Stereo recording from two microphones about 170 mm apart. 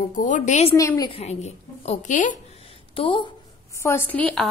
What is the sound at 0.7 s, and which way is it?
Speech, 15° left (ahead or behind).